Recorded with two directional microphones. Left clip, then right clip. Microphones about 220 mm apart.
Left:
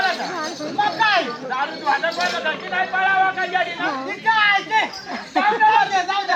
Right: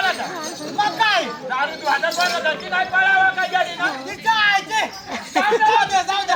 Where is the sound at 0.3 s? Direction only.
45° left (ahead or behind).